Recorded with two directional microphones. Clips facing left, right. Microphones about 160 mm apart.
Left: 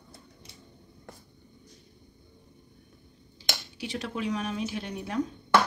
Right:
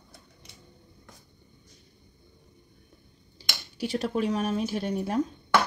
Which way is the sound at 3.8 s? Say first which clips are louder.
Right 6 dB; 35° right (ahead or behind).